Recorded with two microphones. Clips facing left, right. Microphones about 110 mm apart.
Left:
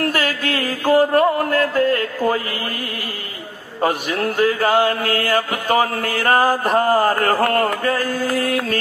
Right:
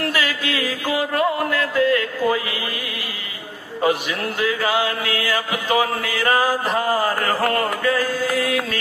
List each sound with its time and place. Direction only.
0.0 s music: 50° left (ahead or behind)
3.8 s mantra: 45° left (ahead or behind)